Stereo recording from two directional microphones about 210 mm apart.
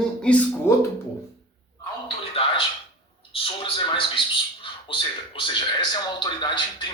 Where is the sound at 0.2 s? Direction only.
5° left (ahead or behind).